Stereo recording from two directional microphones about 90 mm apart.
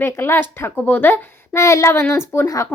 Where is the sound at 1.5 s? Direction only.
35° left (ahead or behind).